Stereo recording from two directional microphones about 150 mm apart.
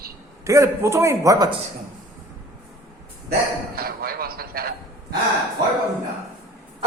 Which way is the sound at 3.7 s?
85° right.